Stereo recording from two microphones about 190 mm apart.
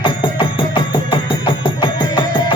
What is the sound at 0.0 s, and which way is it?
Music, 25° left (ahead or behind).